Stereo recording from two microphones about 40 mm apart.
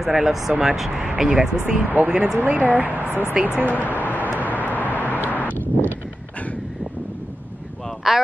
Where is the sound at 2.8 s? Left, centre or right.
Right.